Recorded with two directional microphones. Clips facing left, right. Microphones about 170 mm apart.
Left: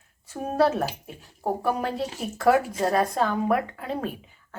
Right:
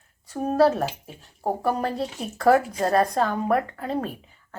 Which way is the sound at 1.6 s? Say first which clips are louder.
Right 2 dB; centre (ahead or behind).